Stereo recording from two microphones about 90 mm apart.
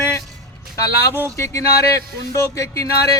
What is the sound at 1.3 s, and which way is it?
Speech, 35° left (ahead or behind).